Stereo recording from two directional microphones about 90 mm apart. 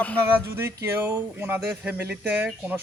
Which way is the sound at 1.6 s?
15° right (ahead or behind).